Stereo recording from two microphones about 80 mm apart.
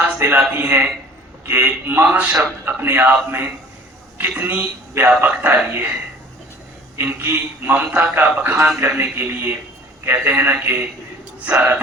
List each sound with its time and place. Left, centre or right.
0.5 s a man's voice: right
2.4 s a man's voice: right
6.9 s a man's voice: right